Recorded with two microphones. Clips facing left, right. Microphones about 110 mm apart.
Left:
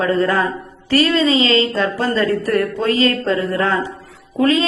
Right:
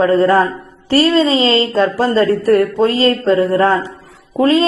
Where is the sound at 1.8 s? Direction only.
30° right (ahead or behind).